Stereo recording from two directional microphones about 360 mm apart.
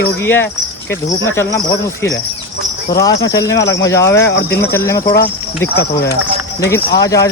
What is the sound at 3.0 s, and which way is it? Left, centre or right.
Speech, centre.